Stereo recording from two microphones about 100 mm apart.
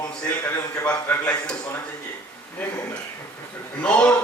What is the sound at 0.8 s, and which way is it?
Speech, 15° left (ahead or behind).